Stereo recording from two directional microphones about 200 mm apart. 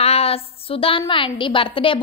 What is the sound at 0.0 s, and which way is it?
A woman's voice, 30° left (ahead or behind).